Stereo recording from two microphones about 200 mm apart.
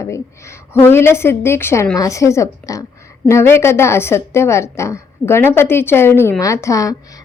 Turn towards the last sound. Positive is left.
turn(degrees=15)  # may be behind; listen again after turning